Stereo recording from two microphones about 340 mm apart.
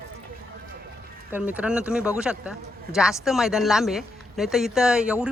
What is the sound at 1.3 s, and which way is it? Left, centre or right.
A man's voice, centre.